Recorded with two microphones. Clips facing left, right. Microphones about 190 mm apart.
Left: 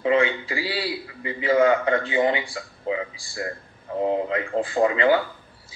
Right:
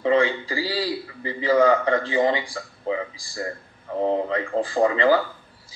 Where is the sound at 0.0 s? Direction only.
35° right (ahead or behind).